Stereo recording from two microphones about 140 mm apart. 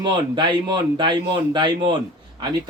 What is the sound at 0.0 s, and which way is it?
Speech, 30° right (ahead or behind).